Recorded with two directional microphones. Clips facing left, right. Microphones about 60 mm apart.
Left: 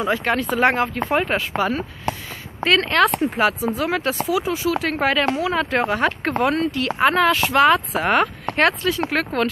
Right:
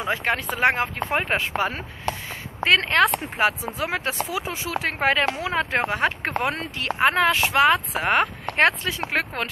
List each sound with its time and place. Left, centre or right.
0.1 s speech: centre
1.1 s speech: right